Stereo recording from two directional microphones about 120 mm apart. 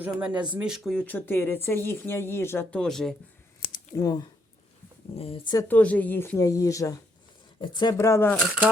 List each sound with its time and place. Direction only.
0.0 s speech: 10° right (ahead or behind)
0.9 s speech: 15° left (ahead or behind)
2.6 s speech: 5° left (ahead or behind)
3.9 s speech: 30° left (ahead or behind)
5.1 s speech: 55° left (ahead or behind)
5.6 s speech: 15° left (ahead or behind)
7.6 s speech: 40° left (ahead or behind)
7.9 s speech: 20° left (ahead or behind)
8.4 s speech: 5° right (ahead or behind)